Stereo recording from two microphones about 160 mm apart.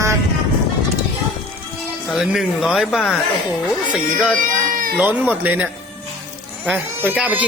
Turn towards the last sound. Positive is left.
turn(degrees=-10)  # may be behind; listen again after turning